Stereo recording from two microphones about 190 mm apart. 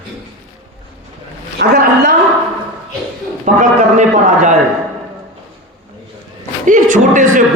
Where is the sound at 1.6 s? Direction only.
60° right (ahead or behind).